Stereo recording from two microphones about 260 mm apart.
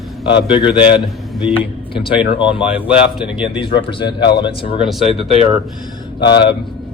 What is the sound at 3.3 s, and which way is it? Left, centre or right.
Speech, centre.